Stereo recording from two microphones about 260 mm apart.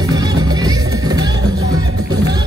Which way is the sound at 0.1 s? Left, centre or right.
Centre.